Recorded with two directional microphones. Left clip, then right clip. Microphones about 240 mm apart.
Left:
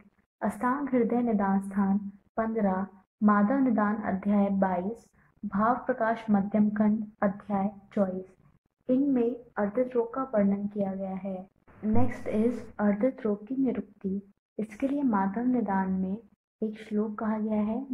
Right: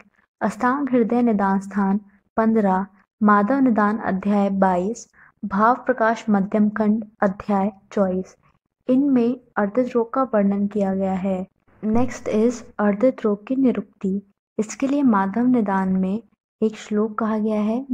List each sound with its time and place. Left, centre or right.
0.4 s a woman's voice: right